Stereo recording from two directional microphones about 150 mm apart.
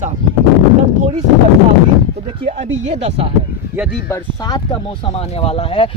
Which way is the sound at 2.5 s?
45° right (ahead or behind).